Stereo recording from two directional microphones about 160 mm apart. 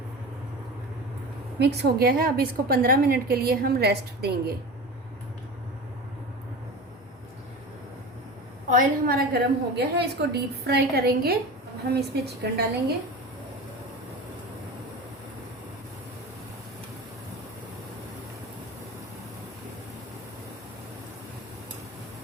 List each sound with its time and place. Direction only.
1.5 s a woman's voice: 90° right
8.7 s a woman's voice: 65° right (ahead or behind)
11.9 s a woman's voice: 90° right